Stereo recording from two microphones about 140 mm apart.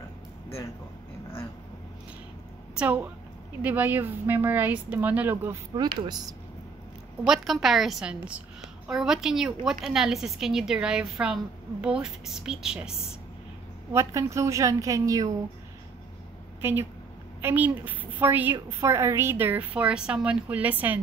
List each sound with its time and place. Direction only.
2.8 s a woman's voice: 10° right (ahead or behind)
5.8 s a woman's voice: 30° right (ahead or behind)
7.2 s a woman's voice: centre (ahead or behind)
13.9 s a woman's voice: 20° right (ahead or behind)
17.4 s a woman's voice: 15° right (ahead or behind)